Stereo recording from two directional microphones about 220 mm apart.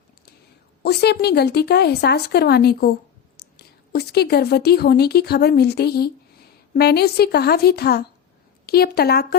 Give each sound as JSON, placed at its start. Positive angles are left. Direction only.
{"t": 0.8, "sound": "speech", "side_deg": 50}